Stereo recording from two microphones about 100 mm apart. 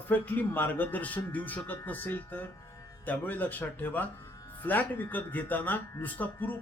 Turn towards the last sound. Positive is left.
turn(degrees=15)  # may be behind; listen again after turning